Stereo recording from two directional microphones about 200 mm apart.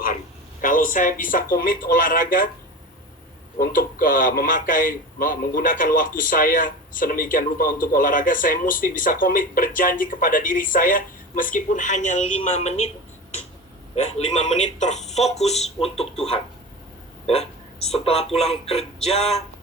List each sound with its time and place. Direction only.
0.6 s a man's voice: 40° left (ahead or behind)
3.6 s a man's voice: 45° left (ahead or behind)
13.9 s speech: 30° left (ahead or behind)
17.8 s speech: 30° left (ahead or behind)